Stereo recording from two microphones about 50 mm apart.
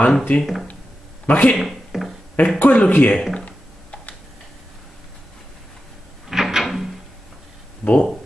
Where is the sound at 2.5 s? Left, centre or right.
Left.